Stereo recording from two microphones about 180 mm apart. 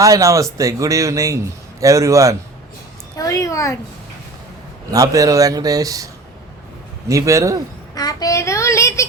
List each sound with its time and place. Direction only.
0.0 s a man's voice: 20° right (ahead or behind)
3.2 s a woman's voice: 20° left (ahead or behind)
4.9 s a man's voice: 20° right (ahead or behind)
7.1 s a man's voice: 15° right (ahead or behind)
7.9 s child singing: 20° left (ahead or behind)